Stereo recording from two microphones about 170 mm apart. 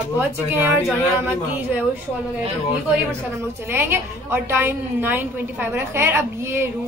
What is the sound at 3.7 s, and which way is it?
A woman's voice, 10° right (ahead or behind).